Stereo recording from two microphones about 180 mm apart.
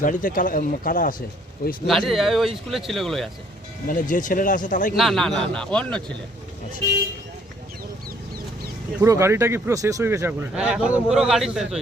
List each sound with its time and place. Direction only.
0.0 s speech: 50° left (ahead or behind)
1.9 s a man's voice: centre (ahead or behind)
4.1 s speech: 50° left (ahead or behind)
4.9 s a man's voice: centre (ahead or behind)
9.0 s speech: 15° right (ahead or behind)